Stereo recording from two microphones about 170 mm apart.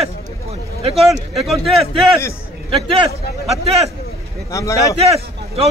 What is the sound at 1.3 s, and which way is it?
Speech, centre (ahead or behind).